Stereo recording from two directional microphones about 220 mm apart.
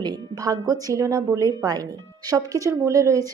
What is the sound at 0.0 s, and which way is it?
A woman's voice, 20° right (ahead or behind).